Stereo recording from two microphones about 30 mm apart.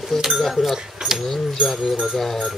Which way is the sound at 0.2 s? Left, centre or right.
Centre.